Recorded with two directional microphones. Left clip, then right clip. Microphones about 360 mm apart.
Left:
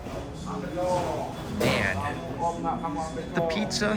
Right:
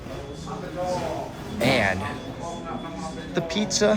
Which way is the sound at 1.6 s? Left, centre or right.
Centre.